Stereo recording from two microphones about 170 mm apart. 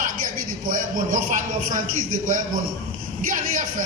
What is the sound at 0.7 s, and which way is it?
A man's voice, 50° right (ahead or behind).